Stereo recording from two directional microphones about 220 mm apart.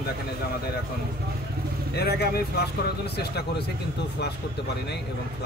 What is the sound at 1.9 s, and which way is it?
Speech, 45° left (ahead or behind).